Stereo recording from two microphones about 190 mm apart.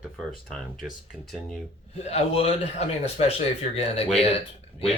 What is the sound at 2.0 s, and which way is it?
Speech, 35° left (ahead or behind).